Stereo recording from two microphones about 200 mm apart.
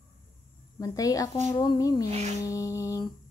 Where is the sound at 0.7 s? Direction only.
15° left (ahead or behind).